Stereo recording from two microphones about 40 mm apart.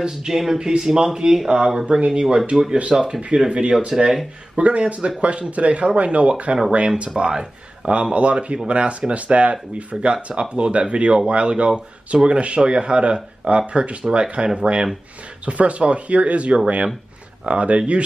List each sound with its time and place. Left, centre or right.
0.0 s speech: centre
0.3 s a man's voice: centre; by 2.2 s right
2.5 s speech: centre
3.2 s a man's voice: right
7.2 s speech: centre
7.9 s a man's voice: right
15.4 s a man's voice: right